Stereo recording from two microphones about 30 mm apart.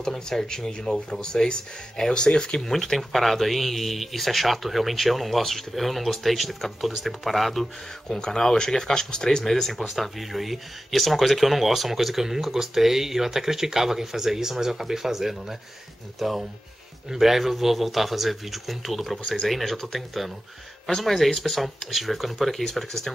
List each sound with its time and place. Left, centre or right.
0.0 s speech: centre
2.6 s speech: centre
8.2 s speech: left
9.7 s speech: centre
22.6 s speech: centre